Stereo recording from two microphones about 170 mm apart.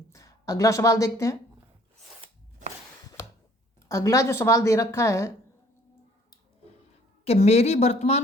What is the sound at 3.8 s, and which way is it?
A woman's voice, 20° left (ahead or behind).